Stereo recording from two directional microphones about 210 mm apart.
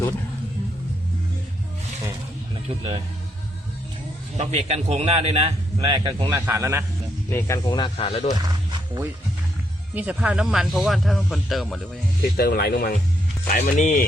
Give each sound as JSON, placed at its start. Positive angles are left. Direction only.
{"t": 2.6, "sound": "a man's voice", "side_deg": -25}
{"t": 4.4, "sound": "a man's voice", "side_deg": -30}
{"t": 7.3, "sound": "speech", "side_deg": 10}
{"t": 8.4, "sound": "wild animals", "side_deg": -20}
{"t": 9.9, "sound": "speech", "side_deg": -5}
{"t": 12.4, "sound": "speech", "side_deg": 50}